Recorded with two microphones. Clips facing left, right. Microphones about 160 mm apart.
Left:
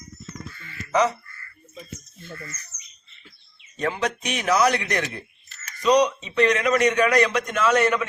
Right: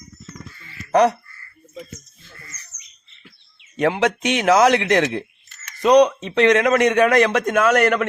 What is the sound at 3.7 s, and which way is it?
Speech, 85° right.